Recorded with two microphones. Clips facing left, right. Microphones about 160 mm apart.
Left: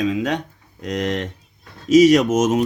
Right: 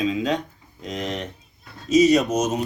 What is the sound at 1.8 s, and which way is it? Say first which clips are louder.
Speech: left 4 dB; 90° left.